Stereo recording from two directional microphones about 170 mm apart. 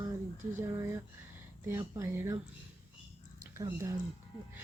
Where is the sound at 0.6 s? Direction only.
15° right (ahead or behind).